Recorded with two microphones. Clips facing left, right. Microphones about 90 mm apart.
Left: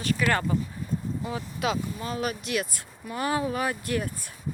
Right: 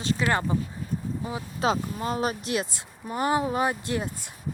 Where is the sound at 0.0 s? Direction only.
25° right (ahead or behind).